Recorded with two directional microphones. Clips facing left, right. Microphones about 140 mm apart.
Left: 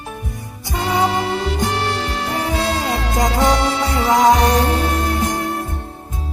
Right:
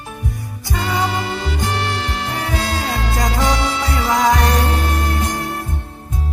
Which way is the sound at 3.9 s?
20° left (ahead or behind).